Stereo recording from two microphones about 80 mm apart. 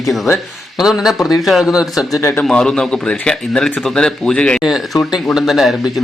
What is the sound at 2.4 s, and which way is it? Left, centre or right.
Speech, centre.